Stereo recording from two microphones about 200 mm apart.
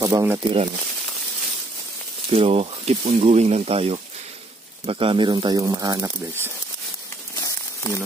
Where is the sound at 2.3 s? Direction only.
30° right (ahead or behind); by 6.5 s 10° right (ahead or behind).